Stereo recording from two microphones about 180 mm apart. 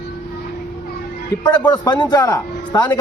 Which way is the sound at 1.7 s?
25° left (ahead or behind).